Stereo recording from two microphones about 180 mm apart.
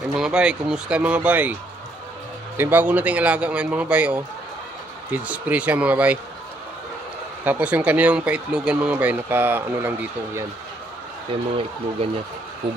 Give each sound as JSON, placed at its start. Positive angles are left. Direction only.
{"t": 0.2, "sound": "speech", "side_deg": -5}
{"t": 7.4, "sound": "speech", "side_deg": -10}
{"t": 12.0, "sound": "speech", "side_deg": -30}